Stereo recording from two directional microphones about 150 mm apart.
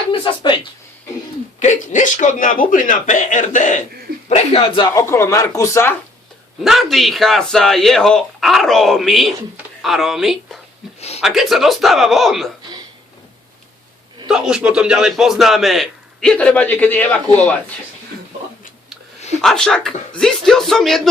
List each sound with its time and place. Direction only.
0.1 s a sound: 35° left (ahead or behind)
1.5 s a man's voice: 55° left (ahead or behind)
4.3 s speech: 45° left (ahead or behind)
4.9 s speech: 20° left (ahead or behind)
6.6 s speech: centre (ahead or behind)
14.3 s speech: 5° right (ahead or behind)
19.4 s speech: 5° left (ahead or behind)